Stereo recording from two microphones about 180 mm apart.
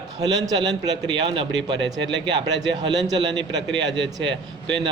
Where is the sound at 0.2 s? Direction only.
20° right (ahead or behind).